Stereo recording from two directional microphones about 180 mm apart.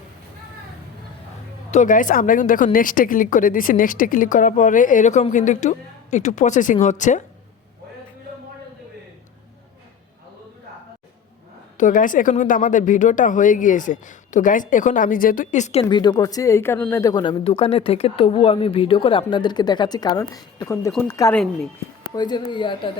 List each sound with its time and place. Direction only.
1.7 s speech: 45° left (ahead or behind)
11.8 s a woman's voice: 45° left (ahead or behind); by 21.4 s 15° left (ahead or behind)
22.1 s a woman's voice: 25° left (ahead or behind)